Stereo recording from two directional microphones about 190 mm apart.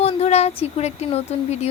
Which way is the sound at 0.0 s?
35° left (ahead or behind).